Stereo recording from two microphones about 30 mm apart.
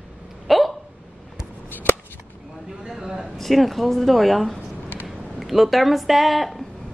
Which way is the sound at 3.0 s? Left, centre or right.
Centre.